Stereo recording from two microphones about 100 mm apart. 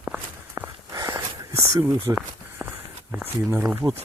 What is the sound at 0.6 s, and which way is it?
Sigh, 30° right (ahead or behind).